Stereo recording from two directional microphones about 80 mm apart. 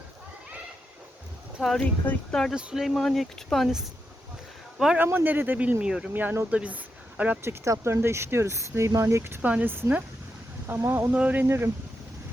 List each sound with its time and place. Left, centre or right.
1.6 s speech: centre
2.0 s speech: left
2.5 s speech: centre
2.8 s speech: centre
5.0 s speech: right
5.8 s speech: centre
6.1 s speech: right
7.4 s speech: right
11.1 s speech: centre
11.4 s speech: right